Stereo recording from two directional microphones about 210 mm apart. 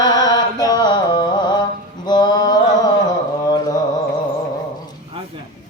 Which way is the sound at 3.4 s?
20° left (ahead or behind).